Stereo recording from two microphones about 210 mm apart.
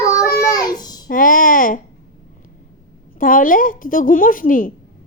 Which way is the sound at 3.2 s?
40° left (ahead or behind).